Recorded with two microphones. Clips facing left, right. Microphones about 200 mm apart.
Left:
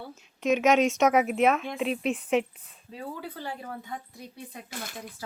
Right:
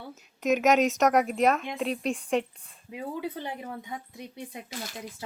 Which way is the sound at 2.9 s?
20° right (ahead or behind).